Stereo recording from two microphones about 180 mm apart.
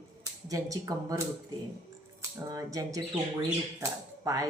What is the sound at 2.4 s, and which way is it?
Speech, 20° right (ahead or behind).